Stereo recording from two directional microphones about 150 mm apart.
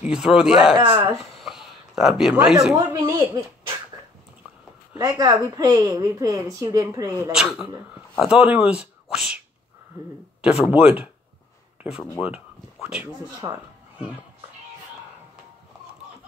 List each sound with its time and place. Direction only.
0.0 s speech: 5° right (ahead or behind)
0.7 s speech: 35° right (ahead or behind)
1.3 s a sound: centre (ahead or behind)
2.8 s speech: 15° right (ahead or behind)
4.9 s a woman's voice: 25° right (ahead or behind)
7.3 s speech: 5° right (ahead or behind)
10.4 s speech: 5° right (ahead or behind)
12.8 s speech: 5° right (ahead or behind)
13.4 s a woman's voice: 25° right (ahead or behind)